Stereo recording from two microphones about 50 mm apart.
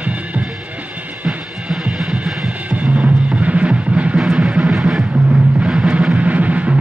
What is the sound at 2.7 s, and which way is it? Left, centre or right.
Music, right.